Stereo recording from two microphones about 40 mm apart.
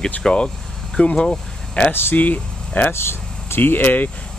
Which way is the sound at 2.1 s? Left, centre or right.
Left.